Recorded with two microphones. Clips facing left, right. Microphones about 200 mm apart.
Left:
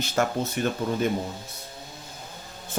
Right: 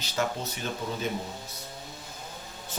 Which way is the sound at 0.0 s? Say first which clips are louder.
Left 5 dB; 50° left (ahead or behind).